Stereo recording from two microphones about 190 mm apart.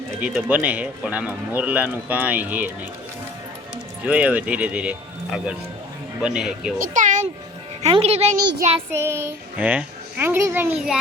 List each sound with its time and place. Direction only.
0.2 s speech: 5° right (ahead or behind)
4.0 s a man's voice: 5° right (ahead or behind)
6.7 s a sound: 45° right (ahead or behind)
7.8 s a child's voice: 35° right (ahead or behind)
8.4 s child singing: 55° right (ahead or behind)
9.0 s speech: 15° right (ahead or behind)